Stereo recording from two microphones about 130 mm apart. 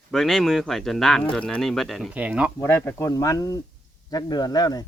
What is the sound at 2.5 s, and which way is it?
Speech, 15° left (ahead or behind).